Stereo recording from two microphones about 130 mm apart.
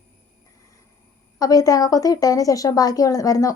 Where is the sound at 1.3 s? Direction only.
30° left (ahead or behind).